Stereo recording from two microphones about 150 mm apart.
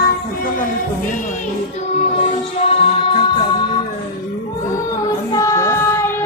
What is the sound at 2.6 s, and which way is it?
Music, 40° left (ahead or behind).